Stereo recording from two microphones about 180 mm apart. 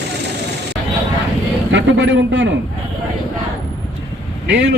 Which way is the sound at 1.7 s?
85° right.